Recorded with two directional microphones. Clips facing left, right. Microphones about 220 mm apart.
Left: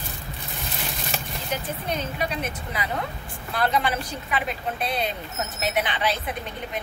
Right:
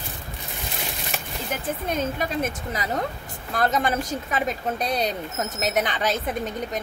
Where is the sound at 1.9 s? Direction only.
45° right (ahead or behind).